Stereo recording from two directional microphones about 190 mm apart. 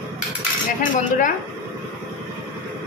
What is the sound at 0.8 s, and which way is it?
Speech, 45° left (ahead or behind).